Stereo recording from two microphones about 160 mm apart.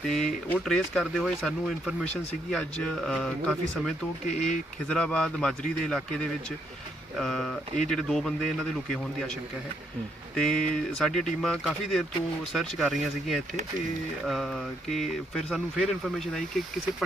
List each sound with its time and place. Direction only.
0.0 s speech: 5° left (ahead or behind)
4.3 s speech: 50° left (ahead or behind)
4.9 s speech: 5° left (ahead or behind)
10.3 s speech: 5° left (ahead or behind)